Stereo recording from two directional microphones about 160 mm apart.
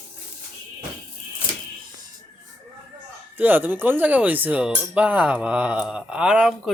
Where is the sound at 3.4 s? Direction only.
10° right (ahead or behind).